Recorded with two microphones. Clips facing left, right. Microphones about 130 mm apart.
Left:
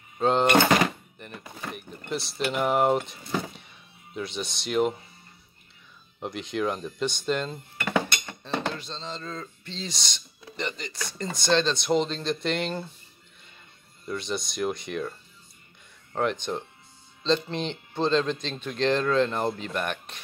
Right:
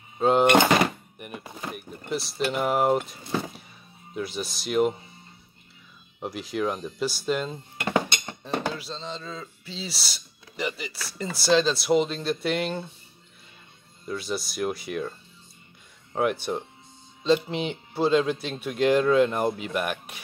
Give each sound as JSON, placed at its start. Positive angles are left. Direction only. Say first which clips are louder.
{"t": 0.2, "sound": "speech", "louder": "right 2 dB", "side_deg": -10}
{"t": 6.1, "sound": "speech", "louder": "right 1 dB", "side_deg": -5}
{"t": 7.8, "sound": "dishes", "louder": "right 1 dB", "side_deg": -20}
{"t": 8.5, "sound": "speech", "louder": "right 1 dB", "side_deg": -5}
{"t": 14.0, "sound": "speech", "louder": "right 1 dB", "side_deg": -5}